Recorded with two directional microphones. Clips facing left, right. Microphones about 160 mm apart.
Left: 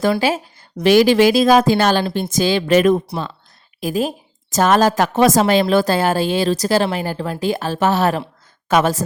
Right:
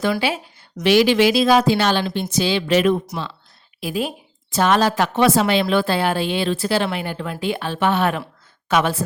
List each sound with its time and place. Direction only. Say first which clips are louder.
0.2 s a woman's voice: left 4 dB; 40° left (ahead or behind)